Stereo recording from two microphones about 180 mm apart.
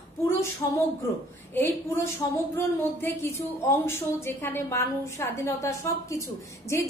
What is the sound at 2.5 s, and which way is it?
A woman's voice, 15° left (ahead or behind).